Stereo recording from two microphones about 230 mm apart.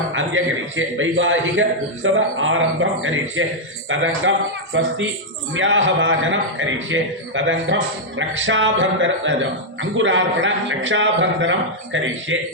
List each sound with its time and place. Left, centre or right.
0.1 s a man's voice: right
5.5 s a man's voice: right